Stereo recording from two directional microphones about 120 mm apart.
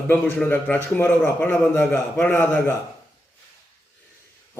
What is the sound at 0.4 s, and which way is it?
A man's voice, 15° left (ahead or behind).